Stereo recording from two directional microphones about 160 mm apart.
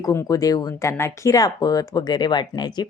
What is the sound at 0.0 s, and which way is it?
A woman's voice, 20° left (ahead or behind).